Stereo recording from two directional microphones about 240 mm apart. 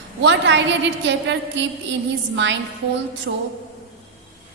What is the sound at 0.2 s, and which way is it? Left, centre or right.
A woman's voice, right.